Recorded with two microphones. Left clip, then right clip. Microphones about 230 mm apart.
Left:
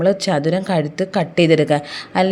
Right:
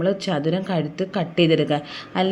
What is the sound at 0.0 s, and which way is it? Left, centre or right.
Speech, left.